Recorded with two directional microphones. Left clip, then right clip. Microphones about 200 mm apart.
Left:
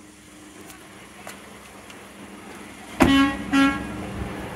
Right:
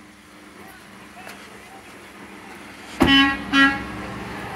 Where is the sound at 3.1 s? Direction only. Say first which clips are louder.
Right 6 dB; 55° left (ahead or behind).